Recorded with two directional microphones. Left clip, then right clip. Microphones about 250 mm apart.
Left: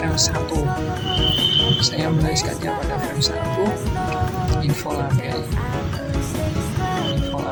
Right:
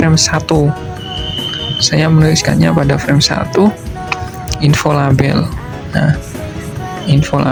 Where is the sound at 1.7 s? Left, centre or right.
Right.